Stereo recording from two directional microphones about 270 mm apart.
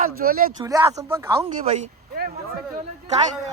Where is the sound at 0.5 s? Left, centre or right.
Centre.